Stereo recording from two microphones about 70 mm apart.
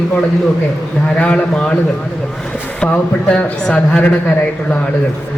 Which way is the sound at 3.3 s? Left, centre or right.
Centre.